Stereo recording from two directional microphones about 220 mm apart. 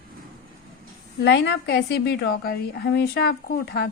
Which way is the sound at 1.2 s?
50° left (ahead or behind).